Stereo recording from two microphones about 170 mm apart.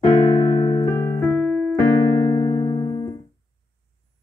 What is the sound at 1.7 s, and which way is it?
Keyboard, 20° left (ahead or behind).